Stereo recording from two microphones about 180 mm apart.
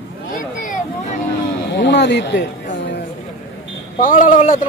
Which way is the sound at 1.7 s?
80° left.